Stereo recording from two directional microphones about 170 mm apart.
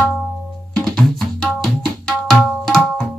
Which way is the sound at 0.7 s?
5° left (ahead or behind).